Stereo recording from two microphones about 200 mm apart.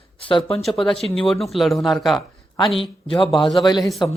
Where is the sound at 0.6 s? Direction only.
Centre (ahead or behind).